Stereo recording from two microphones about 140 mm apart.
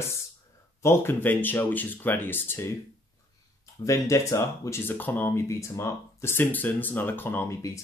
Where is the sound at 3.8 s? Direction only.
20° left (ahead or behind).